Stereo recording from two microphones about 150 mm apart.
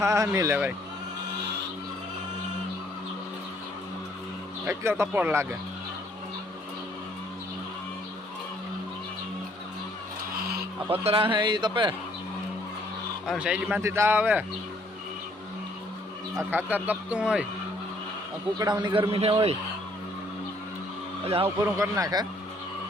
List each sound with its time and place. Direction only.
0.0 s speech: 20° right (ahead or behind)
4.6 s a man's voice: 15° right (ahead or behind)
11.0 s speech: 35° right (ahead or behind)
13.2 s a man's voice: 5° right (ahead or behind)
16.4 s a man's voice: 15° right (ahead or behind)
18.6 s speech: 30° right (ahead or behind)
19.1 s speech: 40° right (ahead or behind)
21.2 s speech: 40° right (ahead or behind)
21.6 s speech: 20° right (ahead or behind)